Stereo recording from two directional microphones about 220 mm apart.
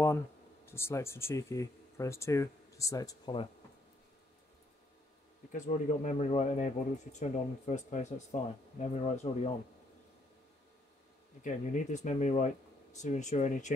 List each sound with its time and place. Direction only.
0.7 s speech: 10° left (ahead or behind)
5.5 s speech: 30° left (ahead or behind)
11.4 s speech: 30° left (ahead or behind)